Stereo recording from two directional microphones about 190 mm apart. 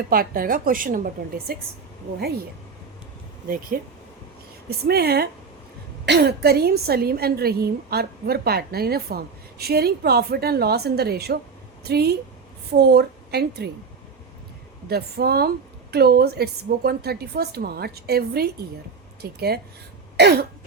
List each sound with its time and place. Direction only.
0.1 s a woman's voice: 50° right (ahead or behind)
3.5 s a woman's voice: 50° right (ahead or behind)
4.9 s a woman's voice: 55° right (ahead or behind)
14.8 s a woman's voice: 55° right (ahead or behind)